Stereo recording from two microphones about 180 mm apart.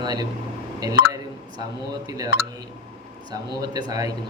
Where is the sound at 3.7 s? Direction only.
20° right (ahead or behind).